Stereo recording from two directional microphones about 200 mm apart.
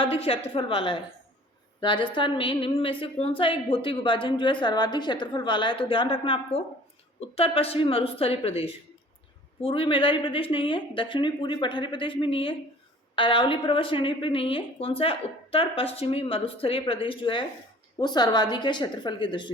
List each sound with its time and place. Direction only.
0.0 s a woman's voice: 30° left (ahead or behind)